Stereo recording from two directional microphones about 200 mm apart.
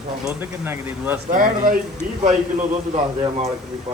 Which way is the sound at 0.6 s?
10° right (ahead or behind).